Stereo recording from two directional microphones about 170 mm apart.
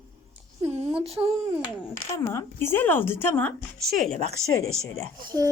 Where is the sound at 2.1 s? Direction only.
15° left (ahead or behind).